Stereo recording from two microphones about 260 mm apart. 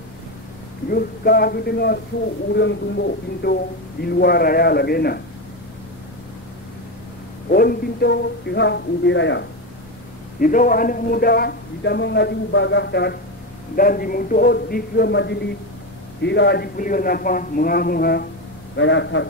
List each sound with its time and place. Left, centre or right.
0.8 s a man's voice: left
7.5 s a man's voice: left
10.4 s a man's voice: left